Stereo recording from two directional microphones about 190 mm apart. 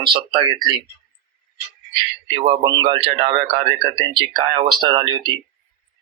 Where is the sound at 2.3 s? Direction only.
25° right (ahead or behind).